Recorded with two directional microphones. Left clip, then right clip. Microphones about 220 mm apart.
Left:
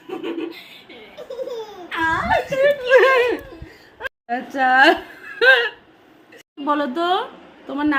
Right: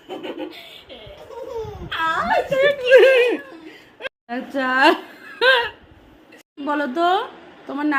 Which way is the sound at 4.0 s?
Centre (ahead or behind).